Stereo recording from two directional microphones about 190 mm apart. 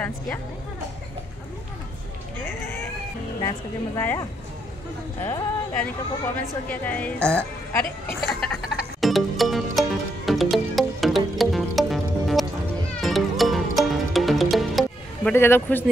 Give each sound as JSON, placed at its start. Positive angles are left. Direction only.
{"t": 2.3, "sound": "vehicle", "side_deg": 10}
{"t": 3.3, "sound": "a woman's voice", "side_deg": 20}
{"t": 8.2, "sound": "music", "side_deg": 0}
{"t": 15.3, "sound": "a woman's voice", "side_deg": 10}